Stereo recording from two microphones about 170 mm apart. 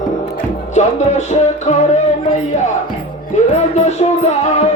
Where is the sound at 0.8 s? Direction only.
45° left (ahead or behind).